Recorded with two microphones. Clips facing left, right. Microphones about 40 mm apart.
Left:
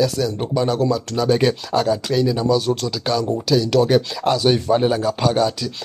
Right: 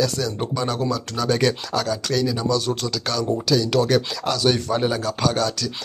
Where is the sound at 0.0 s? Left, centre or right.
Centre.